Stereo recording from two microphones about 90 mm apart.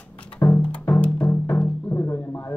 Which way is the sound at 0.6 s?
10° left (ahead or behind).